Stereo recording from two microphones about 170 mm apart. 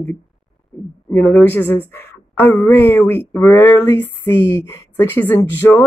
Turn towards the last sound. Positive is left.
turn(degrees=15)  # may be behind; listen again after turning